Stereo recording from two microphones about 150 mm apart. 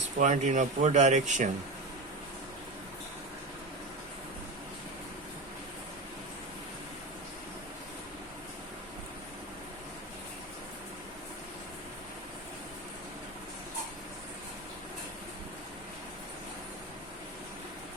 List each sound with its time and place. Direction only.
0.0 s speech: 55° right (ahead or behind)